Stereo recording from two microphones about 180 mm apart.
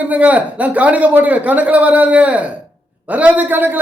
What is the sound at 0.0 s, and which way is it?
Speech, 10° right (ahead or behind).